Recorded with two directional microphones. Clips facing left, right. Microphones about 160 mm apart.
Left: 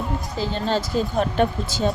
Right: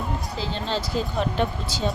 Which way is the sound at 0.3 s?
50° left (ahead or behind).